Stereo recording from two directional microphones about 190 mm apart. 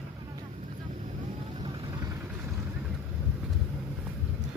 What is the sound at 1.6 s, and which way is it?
Vehicle, 25° right (ahead or behind).